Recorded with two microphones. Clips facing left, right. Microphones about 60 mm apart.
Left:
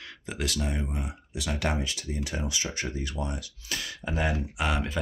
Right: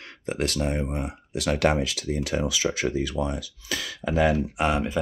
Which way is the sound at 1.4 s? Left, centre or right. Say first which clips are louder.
Right 8 dB; right.